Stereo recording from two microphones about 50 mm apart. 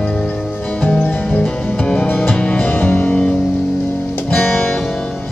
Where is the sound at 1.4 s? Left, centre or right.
Centre.